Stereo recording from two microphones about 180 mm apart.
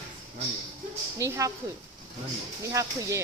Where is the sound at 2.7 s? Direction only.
15° right (ahead or behind).